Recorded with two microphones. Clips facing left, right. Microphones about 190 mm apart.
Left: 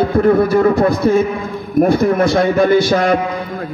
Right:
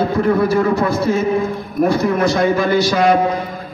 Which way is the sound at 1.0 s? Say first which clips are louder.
Left 2 dB; 50° left (ahead or behind).